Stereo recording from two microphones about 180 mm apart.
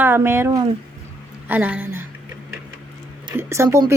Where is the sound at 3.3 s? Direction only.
15° right (ahead or behind).